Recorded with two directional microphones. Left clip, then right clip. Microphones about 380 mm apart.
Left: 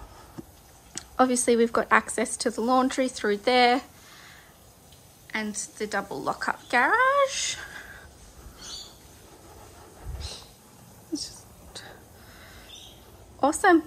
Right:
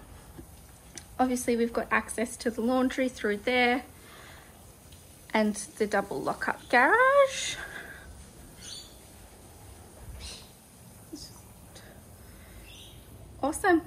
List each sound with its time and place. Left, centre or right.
0.9 s a woman's voice: centre
5.3 s speech: centre
13.4 s a woman's voice: centre